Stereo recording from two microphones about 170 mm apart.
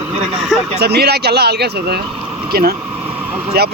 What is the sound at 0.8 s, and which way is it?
Speech, 70° right (ahead or behind).